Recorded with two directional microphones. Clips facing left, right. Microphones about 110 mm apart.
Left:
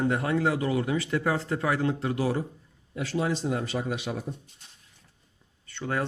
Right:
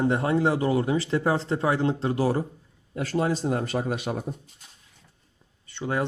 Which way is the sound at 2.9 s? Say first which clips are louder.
Right 3 dB; 50° right (ahead or behind).